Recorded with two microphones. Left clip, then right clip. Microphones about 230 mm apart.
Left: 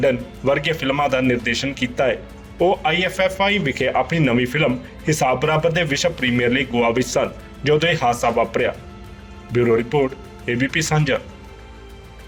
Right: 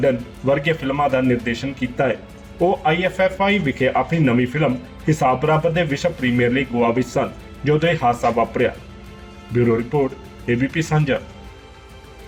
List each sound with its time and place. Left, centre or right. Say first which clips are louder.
0.0 s speech: even; left